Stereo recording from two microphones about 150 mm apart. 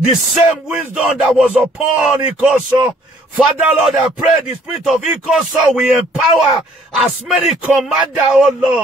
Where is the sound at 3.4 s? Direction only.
Centre (ahead or behind).